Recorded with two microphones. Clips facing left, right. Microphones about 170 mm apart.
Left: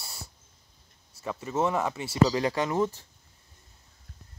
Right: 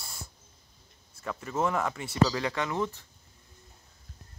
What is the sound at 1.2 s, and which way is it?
Speech, 20° left (ahead or behind).